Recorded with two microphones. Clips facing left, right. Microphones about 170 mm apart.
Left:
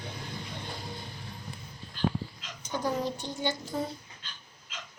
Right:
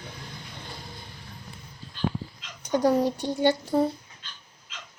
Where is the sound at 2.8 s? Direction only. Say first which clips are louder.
Right 8 dB; 65° right (ahead or behind).